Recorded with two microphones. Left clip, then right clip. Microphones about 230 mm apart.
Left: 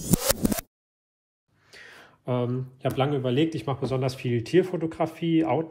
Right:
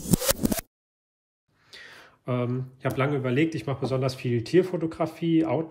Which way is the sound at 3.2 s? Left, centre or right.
Right.